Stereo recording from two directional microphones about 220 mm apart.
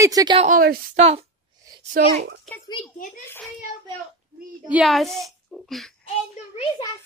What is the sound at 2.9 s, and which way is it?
Speech, 40° left (ahead or behind).